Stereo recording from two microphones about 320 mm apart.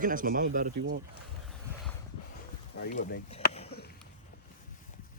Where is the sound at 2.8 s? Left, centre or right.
Left.